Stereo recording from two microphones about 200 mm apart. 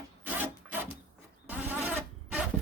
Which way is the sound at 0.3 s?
10° right (ahead or behind).